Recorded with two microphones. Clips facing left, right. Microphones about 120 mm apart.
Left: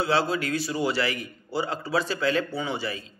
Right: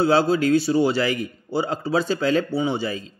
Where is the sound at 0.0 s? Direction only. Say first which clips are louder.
Right 7 dB; 30° right (ahead or behind).